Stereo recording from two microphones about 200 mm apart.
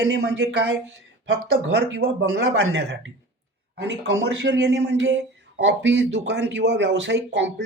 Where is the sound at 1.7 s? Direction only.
60° right (ahead or behind).